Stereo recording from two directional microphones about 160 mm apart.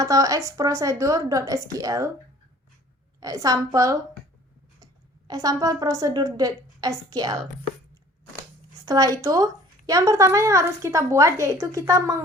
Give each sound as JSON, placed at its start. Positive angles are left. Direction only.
{"t": 0.0, "sound": "a woman's voice", "side_deg": -20}
{"t": 3.2, "sound": "a woman's voice", "side_deg": -20}
{"t": 5.3, "sound": "a woman's voice", "side_deg": -20}
{"t": 8.8, "sound": "a woman's voice", "side_deg": -25}